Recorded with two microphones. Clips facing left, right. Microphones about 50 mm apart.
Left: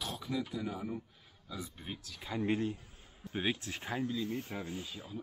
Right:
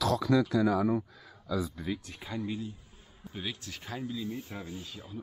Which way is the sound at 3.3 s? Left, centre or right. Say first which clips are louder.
Left 4 dB; left.